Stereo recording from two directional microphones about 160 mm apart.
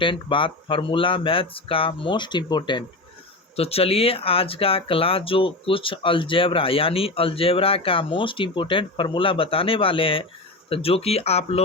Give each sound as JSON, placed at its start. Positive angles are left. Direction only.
{"t": 0.0, "sound": "speech", "side_deg": 30}